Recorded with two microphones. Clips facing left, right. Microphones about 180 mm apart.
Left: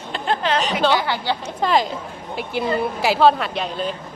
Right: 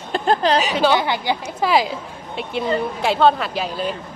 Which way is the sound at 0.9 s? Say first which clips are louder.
Right 2 dB; 20° right (ahead or behind).